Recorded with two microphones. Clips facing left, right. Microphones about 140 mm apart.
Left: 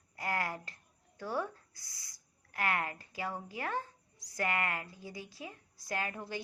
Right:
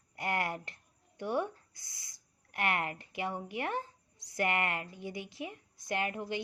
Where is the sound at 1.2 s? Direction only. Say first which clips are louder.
Right 3 dB; 20° right (ahead or behind).